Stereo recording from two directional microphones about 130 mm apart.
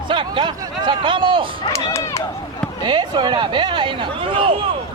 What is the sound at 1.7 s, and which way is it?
Speech, 20° left (ahead or behind).